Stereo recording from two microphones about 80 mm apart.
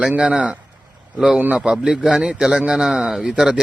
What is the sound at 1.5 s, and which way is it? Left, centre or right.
A man's voice, centre.